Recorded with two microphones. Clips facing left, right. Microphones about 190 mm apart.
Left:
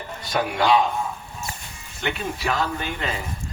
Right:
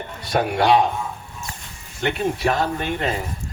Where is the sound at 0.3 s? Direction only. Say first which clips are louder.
Right 3 dB; 55° right (ahead or behind).